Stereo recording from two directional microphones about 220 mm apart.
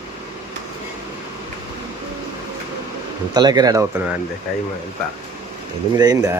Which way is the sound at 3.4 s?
20° right (ahead or behind).